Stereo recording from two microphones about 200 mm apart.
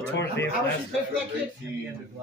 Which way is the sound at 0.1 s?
60° left (ahead or behind).